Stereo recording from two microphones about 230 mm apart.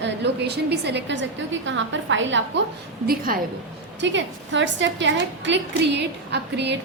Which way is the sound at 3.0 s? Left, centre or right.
Right.